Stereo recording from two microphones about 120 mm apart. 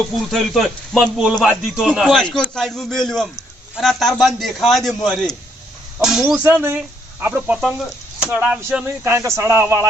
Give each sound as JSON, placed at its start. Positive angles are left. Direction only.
{"t": 0.3, "sound": "a man's voice", "side_deg": 0}
{"t": 6.2, "sound": "speech", "side_deg": -15}
{"t": 8.8, "sound": "speech", "side_deg": -25}